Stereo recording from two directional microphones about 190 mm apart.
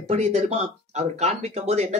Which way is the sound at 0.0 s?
35° right (ahead or behind).